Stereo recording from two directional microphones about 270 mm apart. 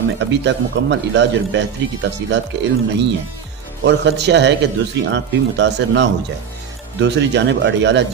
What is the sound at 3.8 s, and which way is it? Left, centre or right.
Speech, right.